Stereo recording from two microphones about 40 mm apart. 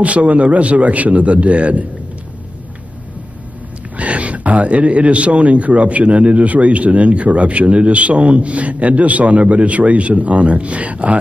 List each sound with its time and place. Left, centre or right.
0.0 s a man's voice: right
3.9 s a man's voice: right